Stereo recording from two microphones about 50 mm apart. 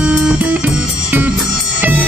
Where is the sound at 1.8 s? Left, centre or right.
Right.